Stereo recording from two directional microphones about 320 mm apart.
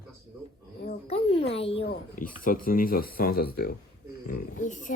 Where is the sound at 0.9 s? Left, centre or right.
Centre.